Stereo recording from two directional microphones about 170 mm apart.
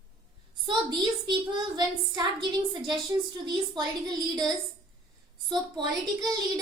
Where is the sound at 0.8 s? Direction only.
25° right (ahead or behind).